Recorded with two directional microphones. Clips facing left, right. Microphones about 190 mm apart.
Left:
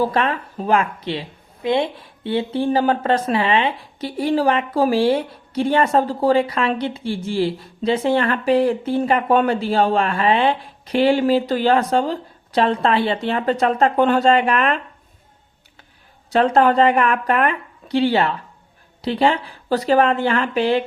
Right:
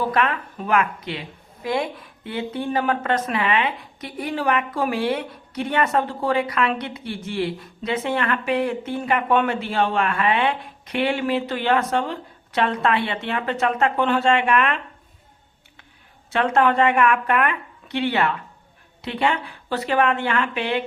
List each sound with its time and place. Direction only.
0.0 s speech: 30° left (ahead or behind)
16.3 s speech: 35° left (ahead or behind)